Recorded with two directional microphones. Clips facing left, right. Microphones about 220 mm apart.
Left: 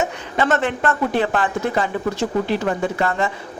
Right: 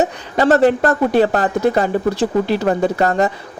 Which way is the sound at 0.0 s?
35° right (ahead or behind).